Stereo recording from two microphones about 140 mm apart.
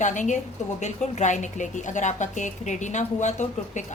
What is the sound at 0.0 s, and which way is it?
A woman's voice, 60° left (ahead or behind).